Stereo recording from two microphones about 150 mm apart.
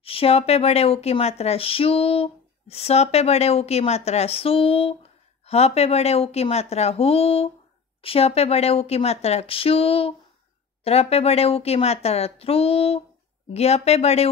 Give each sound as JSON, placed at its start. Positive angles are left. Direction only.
{"t": 0.0, "sound": "speech", "side_deg": 40}